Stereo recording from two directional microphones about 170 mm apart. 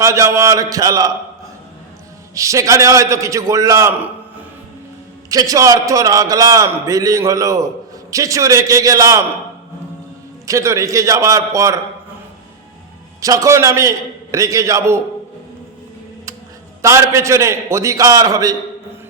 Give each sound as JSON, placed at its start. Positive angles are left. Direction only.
{"t": 0.0, "sound": "a man's voice", "side_deg": -15}
{"t": 2.3, "sound": "a man's voice", "side_deg": -20}
{"t": 5.3, "sound": "a man's voice", "side_deg": -20}
{"t": 10.4, "sound": "a man's voice", "side_deg": -20}
{"t": 13.2, "sound": "a man's voice", "side_deg": -20}
{"t": 16.8, "sound": "a man's voice", "side_deg": -15}